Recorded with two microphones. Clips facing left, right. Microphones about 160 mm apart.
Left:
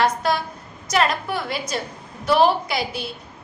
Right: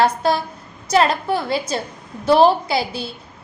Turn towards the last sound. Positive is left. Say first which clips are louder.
# right 4 dB
turn(degrees=-30)  # may be behind; listen again after turning